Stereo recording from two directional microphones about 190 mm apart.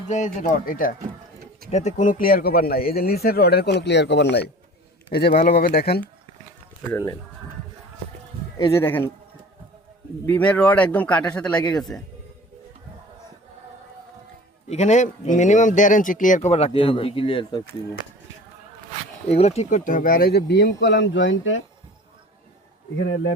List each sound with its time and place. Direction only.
0.1 s speech: 40° left (ahead or behind); by 4.4 s 65° left (ahead or behind)
5.1 s speech: 55° left (ahead or behind)
6.9 s a man's voice: 15° left (ahead or behind)
8.7 s a man's voice: 10° left (ahead or behind)
10.2 s a man's voice: 10° left (ahead or behind)
14.7 s speech: 35° left (ahead or behind)
19.3 s speech: 35° left (ahead or behind); by 21.6 s 85° left
23.0 s speech: 90° left